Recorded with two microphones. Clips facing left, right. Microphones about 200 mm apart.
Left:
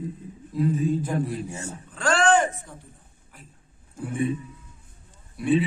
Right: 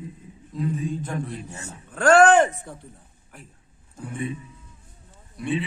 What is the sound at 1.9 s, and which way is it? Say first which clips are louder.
Speech: right 6 dB; 60° right (ahead or behind).